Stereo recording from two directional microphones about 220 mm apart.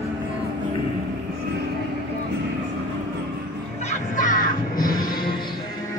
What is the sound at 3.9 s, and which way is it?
Music, 35° left (ahead or behind).